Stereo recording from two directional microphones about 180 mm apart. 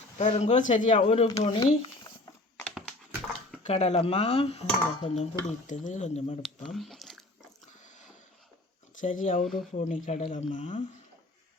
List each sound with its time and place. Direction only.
0.2 s speech: 40° left (ahead or behind)
2.0 s a sound: 20° left (ahead or behind)
2.6 s a sound: 5° left (ahead or behind)
3.6 s speech: 40° left (ahead or behind)
6.7 s chewing: centre (ahead or behind)
9.0 s speech: 45° left (ahead or behind)
9.4 s speech: centre (ahead or behind)
9.7 s speech: 40° left (ahead or behind)